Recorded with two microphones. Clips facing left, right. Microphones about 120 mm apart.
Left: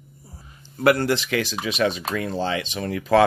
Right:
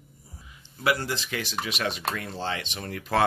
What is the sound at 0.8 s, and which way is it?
Speech, 60° left (ahead or behind).